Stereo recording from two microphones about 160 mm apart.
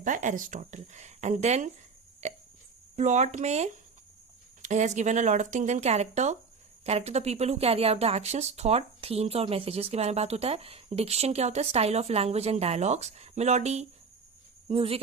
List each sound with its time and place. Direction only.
0.0 s speech: 50° right (ahead or behind)
2.2 s hiccup: 45° right (ahead or behind)
2.9 s a woman's voice: 45° right (ahead or behind)